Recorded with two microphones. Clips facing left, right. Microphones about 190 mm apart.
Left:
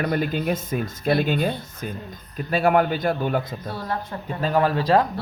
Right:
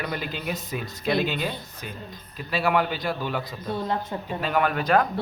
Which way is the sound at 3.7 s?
20° right (ahead or behind).